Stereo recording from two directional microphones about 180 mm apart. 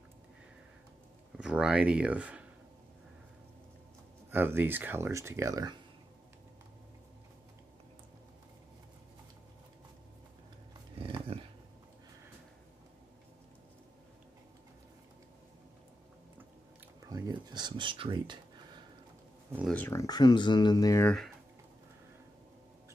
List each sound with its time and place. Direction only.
1.4 s speech: 5° right (ahead or behind)
4.3 s speech: 10° right (ahead or behind)
11.3 s dog: 35° right (ahead or behind)
17.1 s speech: 25° right (ahead or behind)
19.7 s speech: 10° left (ahead or behind)